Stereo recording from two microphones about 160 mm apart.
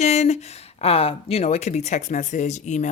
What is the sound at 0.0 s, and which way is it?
A woman's voice, 45° left (ahead or behind).